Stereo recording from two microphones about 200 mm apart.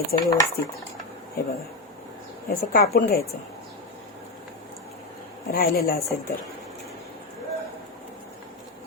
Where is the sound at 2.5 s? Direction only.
50° left (ahead or behind).